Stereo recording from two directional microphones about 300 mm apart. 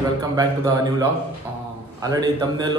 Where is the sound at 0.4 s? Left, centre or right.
Centre.